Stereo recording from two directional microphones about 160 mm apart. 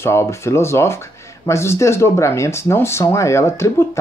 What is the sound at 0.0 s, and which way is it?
Speech, 15° left (ahead or behind).